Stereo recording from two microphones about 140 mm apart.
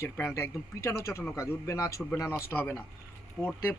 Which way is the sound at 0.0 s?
20° left (ahead or behind).